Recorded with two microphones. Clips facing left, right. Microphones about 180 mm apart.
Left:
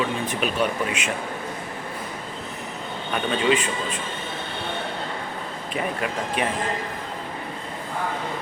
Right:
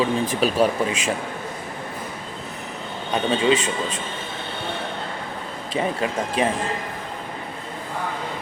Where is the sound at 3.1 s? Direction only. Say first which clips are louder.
Right 3 dB; 30° right (ahead or behind).